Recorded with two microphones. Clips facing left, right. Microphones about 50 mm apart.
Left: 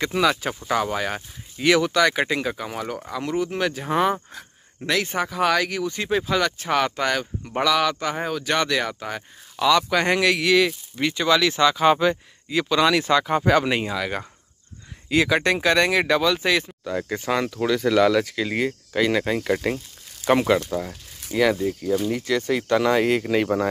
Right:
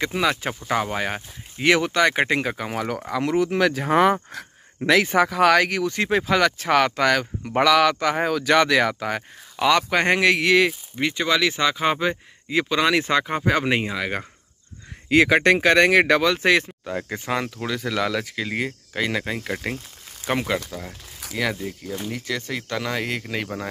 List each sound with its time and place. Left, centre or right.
0.0 s speech: centre; by 9.2 s right
9.6 s speech: right
10.7 s speech: centre
15.0 s speech: right
16.8 s speech: centre
17.6 s speech: centre